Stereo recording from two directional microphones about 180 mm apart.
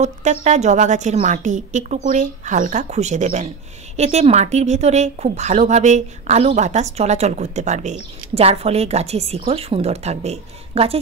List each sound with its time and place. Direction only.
0.0 s a woman's voice: 40° right (ahead or behind)